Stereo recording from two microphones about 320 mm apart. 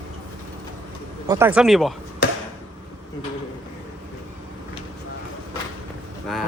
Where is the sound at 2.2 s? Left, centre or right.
Left.